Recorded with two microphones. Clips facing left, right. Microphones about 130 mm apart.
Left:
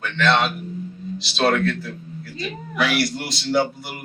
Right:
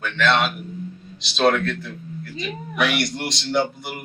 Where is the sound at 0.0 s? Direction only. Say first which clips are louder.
Left 1 dB; centre (ahead or behind).